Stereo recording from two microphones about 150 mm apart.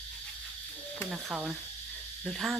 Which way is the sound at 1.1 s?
5° right (ahead or behind).